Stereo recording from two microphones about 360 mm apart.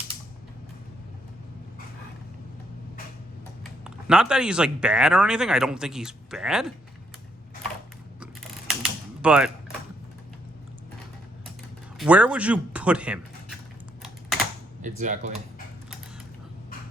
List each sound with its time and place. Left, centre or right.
3.6 s speech: centre
8.2 s mechanisms: centre
11.9 s speech: centre
14.8 s speech: right